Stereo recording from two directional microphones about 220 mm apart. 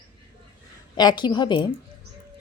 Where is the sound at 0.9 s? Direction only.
20° left (ahead or behind).